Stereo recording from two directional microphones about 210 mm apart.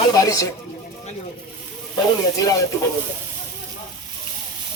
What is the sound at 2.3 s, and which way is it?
Speech, 15° left (ahead or behind).